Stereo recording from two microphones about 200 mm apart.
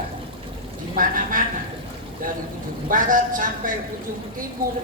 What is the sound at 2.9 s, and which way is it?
Speech, 40° right (ahead or behind).